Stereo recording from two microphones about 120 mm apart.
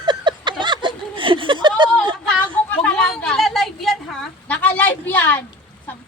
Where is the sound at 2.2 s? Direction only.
10° left (ahead or behind).